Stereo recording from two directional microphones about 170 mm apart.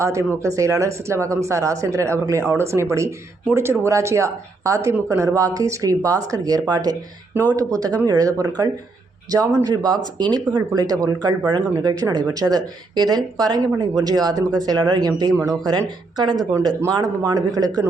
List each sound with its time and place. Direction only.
0.0 s speech: 15° right (ahead or behind)